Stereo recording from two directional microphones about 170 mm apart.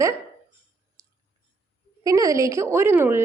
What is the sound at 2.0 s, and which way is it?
A woman's voice, 20° right (ahead or behind).